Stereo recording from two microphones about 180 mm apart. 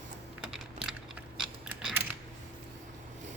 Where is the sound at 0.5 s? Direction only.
5° right (ahead or behind).